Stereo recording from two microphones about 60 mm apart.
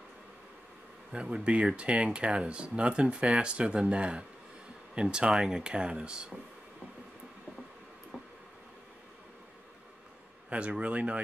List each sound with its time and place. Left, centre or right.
1.1 s speech: centre
10.5 s speech: right